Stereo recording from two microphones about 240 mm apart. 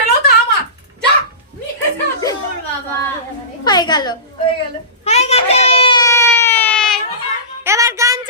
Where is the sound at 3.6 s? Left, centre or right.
Centre.